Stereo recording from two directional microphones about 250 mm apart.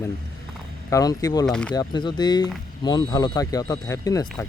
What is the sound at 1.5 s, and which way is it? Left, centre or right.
Speech, centre.